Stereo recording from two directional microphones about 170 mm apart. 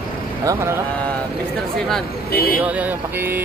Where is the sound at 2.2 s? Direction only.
60° left (ahead or behind).